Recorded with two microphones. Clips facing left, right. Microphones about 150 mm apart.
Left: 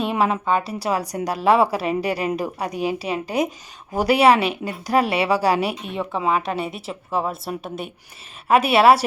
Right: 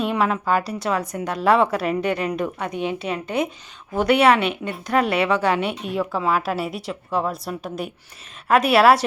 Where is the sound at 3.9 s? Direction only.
35° left (ahead or behind).